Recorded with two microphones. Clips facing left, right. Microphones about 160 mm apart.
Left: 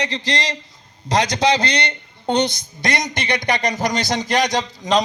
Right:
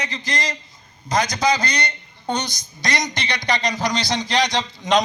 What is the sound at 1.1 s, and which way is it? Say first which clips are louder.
A woman's voice: left 2 dB; 75° left (ahead or behind).